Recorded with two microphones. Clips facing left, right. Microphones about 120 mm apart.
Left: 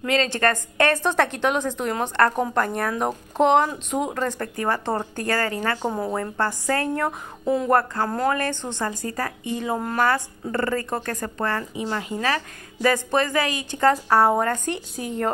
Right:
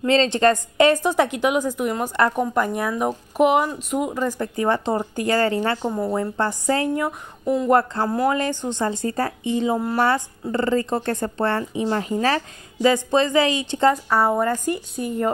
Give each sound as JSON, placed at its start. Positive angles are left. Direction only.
{"t": 0.0, "sound": "a woman's voice", "side_deg": -25}
{"t": 7.1, "sound": "speech", "side_deg": 0}
{"t": 7.7, "sound": "speech", "side_deg": -20}
{"t": 12.8, "sound": "speech", "side_deg": -20}
{"t": 14.0, "sound": "a woman's voice", "side_deg": 0}